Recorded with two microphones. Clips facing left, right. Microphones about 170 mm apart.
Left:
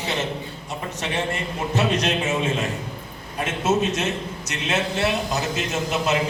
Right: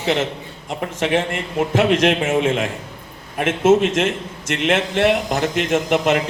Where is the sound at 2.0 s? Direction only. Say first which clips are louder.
Right 6 dB; 50° right (ahead or behind).